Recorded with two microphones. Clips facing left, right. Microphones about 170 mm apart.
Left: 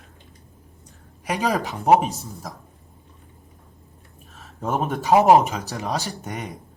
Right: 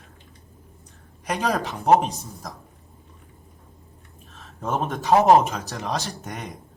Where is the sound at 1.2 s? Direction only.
10° left (ahead or behind).